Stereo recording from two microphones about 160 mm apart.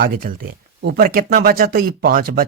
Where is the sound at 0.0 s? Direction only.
65° right (ahead or behind).